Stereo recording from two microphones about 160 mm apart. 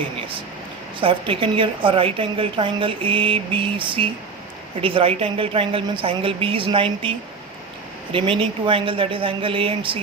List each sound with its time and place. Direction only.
0.9 s a woman's voice: 35° right (ahead or behind)
8.1 s a woman's voice: 35° right (ahead or behind)